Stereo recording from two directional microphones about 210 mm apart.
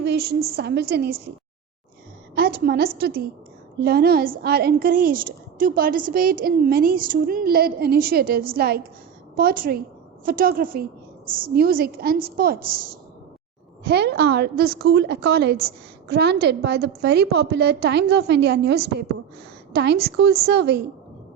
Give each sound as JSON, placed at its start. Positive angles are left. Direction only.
{"t": 0.0, "sound": "a woman's voice", "side_deg": -50}
{"t": 2.3, "sound": "a woman's voice", "side_deg": -45}
{"t": 13.8, "sound": "a woman's voice", "side_deg": -50}